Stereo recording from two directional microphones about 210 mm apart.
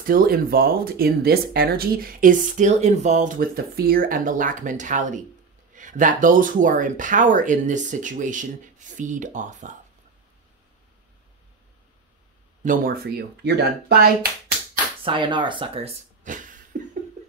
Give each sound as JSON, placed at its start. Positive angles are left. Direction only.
{"t": 0.0, "sound": "speech", "side_deg": -45}
{"t": 12.6, "sound": "speech", "side_deg": -40}
{"t": 15.0, "sound": "speech", "side_deg": -25}